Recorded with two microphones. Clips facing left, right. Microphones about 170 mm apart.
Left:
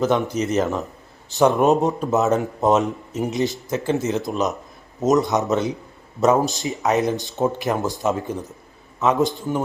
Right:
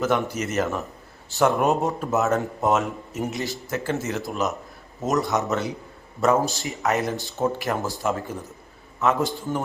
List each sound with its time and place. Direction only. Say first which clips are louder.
0.0 s speech: left 4 dB; 20° left (ahead or behind)